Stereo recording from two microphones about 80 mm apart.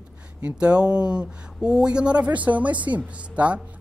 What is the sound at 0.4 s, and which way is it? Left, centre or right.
Speech, centre.